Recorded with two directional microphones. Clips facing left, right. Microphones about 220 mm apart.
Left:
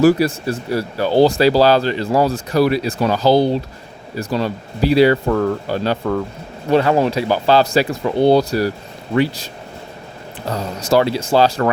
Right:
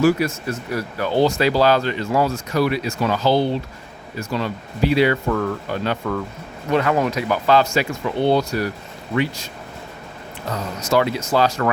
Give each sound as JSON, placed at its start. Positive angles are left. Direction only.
{"t": 0.0, "sound": "speech", "side_deg": 35}
{"t": 10.5, "sound": "speech", "side_deg": 35}